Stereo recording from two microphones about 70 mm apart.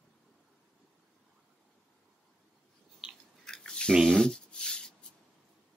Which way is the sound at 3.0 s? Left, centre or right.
Centre.